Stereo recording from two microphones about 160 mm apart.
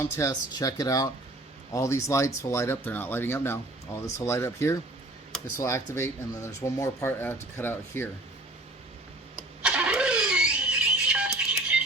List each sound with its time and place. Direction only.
0.0 s speech: 20° left (ahead or behind)
9.6 s vehicle: 5° right (ahead or behind)